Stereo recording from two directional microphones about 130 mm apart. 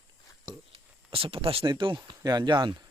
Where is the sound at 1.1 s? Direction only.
45° right (ahead or behind).